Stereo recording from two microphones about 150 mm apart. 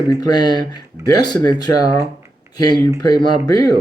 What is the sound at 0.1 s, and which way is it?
Speech, 25° left (ahead or behind).